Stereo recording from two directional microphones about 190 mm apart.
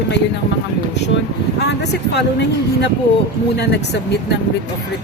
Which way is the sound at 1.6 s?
60° left (ahead or behind).